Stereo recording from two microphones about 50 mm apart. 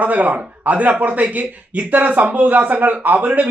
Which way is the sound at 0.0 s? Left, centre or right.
Right.